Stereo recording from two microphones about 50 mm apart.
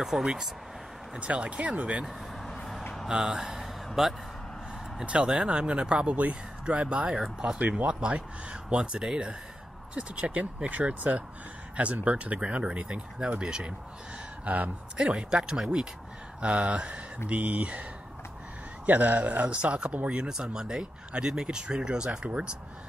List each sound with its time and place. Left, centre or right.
0.0 s speech: centre
1.2 s speech: right
2.4 s vehicle: centre
3.1 s speech: centre
5.0 s speech: right
7.1 s speech: centre
7.5 s speech: right
14.4 s speech: right
15.0 s speech: centre
18.9 s speech: right